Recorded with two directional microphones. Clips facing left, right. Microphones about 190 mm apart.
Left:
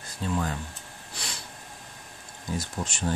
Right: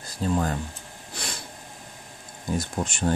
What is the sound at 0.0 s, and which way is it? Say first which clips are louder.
Speech: right 4 dB; 35° right (ahead or behind).